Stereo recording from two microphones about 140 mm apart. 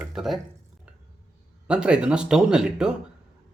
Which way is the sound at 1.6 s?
5° right (ahead or behind).